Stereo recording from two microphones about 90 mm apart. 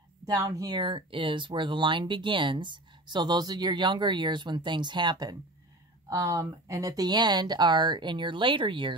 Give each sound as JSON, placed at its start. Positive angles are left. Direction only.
{"t": 0.3, "sound": "speech", "side_deg": -45}
{"t": 0.8, "sound": "speech", "side_deg": -70}
{"t": 6.0, "sound": "speech", "side_deg": -40}